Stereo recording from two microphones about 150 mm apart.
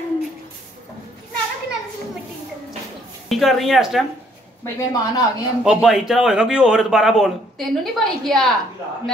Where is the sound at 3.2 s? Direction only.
Centre (ahead or behind).